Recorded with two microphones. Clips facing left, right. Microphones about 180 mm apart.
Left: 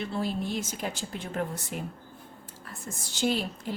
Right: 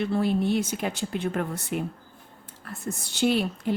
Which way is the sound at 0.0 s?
60° right (ahead or behind).